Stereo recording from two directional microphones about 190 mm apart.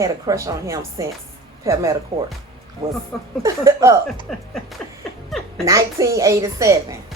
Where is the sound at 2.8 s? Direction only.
30° right (ahead or behind).